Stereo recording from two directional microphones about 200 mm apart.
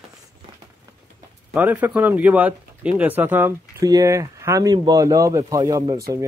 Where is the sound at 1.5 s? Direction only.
10° right (ahead or behind).